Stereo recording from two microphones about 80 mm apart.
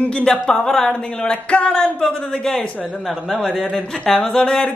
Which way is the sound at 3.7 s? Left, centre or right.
Centre.